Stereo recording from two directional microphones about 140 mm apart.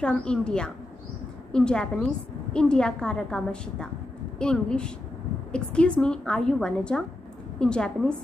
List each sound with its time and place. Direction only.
0.0 s a woman's voice: 5° left (ahead or behind)